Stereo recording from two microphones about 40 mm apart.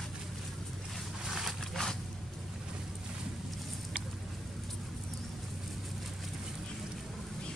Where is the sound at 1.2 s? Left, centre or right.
Centre.